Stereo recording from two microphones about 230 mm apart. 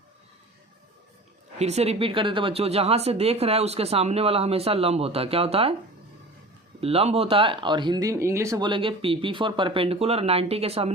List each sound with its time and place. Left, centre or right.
1.5 s speech: right
6.7 s speech: right